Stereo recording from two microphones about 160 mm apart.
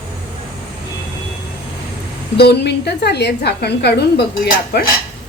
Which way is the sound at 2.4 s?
90° left.